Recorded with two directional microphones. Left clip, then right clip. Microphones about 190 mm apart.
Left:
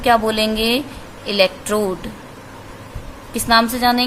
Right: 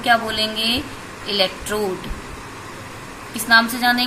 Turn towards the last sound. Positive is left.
turn(degrees=45)  # may be behind; listen again after turning